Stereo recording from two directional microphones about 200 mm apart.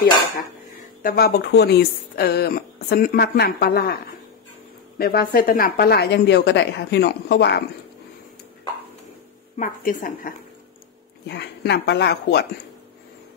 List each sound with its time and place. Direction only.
1.0 s speech: 50° left (ahead or behind)
4.9 s speech: 50° left (ahead or behind)
9.6 s a woman's voice: 40° left (ahead or behind)
11.2 s speech: 55° left (ahead or behind)